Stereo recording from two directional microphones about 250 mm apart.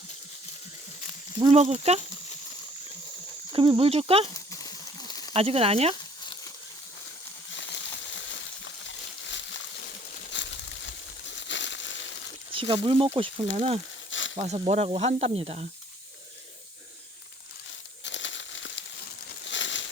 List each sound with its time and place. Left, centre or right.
1.4 s speech: right
3.5 s speech: right
4.4 s a sound: centre
5.3 s speech: right
8.6 s a sound: left
12.5 s speech: centre
14.1 s a sound: left
14.3 s speech: right
18.0 s crumpling: left